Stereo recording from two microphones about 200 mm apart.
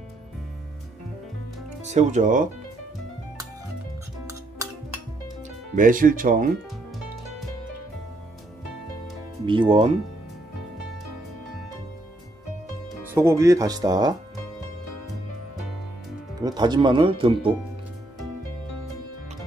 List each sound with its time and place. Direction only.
1.9 s speech: 35° right (ahead or behind)
5.8 s speech: 45° right (ahead or behind)
9.5 s speech: 25° right (ahead or behind)
13.1 s speech: 15° right (ahead or behind)
16.3 s speech: 20° right (ahead or behind)